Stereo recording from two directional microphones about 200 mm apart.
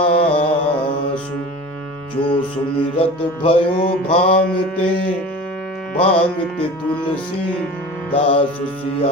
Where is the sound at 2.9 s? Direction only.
30° left (ahead or behind).